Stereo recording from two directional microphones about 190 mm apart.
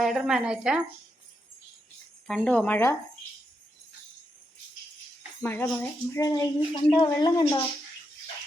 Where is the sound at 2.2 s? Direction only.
5° left (ahead or behind).